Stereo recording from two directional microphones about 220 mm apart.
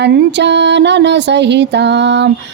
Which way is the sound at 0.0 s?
50° right (ahead or behind).